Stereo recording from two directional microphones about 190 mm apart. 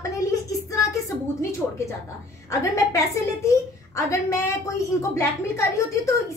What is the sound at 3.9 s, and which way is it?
A woman's voice, 15° left (ahead or behind).